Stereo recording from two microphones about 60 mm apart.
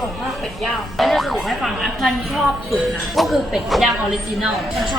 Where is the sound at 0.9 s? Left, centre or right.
Centre.